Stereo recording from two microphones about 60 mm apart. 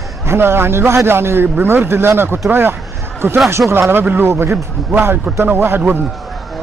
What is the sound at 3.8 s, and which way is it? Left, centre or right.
Speech, right.